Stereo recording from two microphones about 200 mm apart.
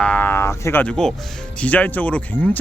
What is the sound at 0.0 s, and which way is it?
Speech, 5° left (ahead or behind).